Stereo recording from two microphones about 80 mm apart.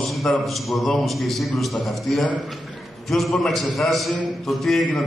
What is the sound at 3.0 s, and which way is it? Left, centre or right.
A man's voice, centre.